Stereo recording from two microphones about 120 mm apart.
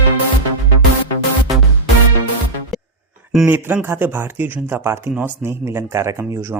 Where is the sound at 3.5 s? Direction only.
15° right (ahead or behind).